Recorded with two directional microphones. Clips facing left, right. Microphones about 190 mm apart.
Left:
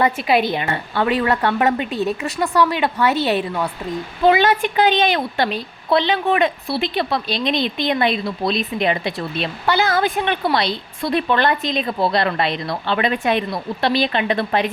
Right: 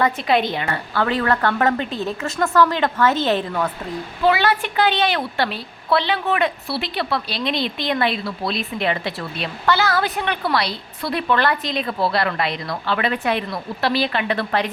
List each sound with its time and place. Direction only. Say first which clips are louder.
0.0 s a woman's voice: left 1 dB; 5° left (ahead or behind)
0.6 s a woman's voice: left 2 dB; 20° left (ahead or behind)